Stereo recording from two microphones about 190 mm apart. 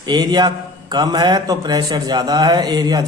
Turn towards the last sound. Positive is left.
turn(degrees=-20)  # may be behind; listen again after turning